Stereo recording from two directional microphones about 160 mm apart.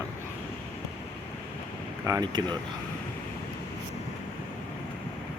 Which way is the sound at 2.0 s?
25° right (ahead or behind).